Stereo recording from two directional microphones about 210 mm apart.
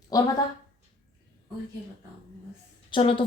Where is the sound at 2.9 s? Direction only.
25° left (ahead or behind).